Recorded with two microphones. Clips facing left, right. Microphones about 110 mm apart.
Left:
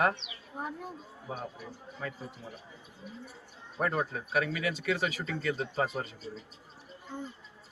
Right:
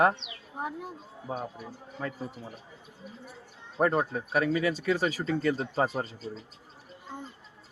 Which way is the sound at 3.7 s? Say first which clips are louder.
Right 5 dB; 35° right (ahead or behind).